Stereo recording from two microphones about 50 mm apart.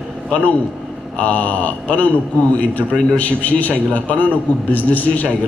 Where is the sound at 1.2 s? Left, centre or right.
Left.